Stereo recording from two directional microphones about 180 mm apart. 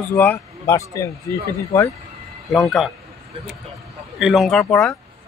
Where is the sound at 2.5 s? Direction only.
Centre (ahead or behind).